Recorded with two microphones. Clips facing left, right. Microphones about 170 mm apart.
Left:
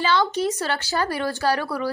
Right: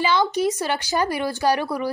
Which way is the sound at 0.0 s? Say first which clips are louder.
Right 1 dB; 15° right (ahead or behind).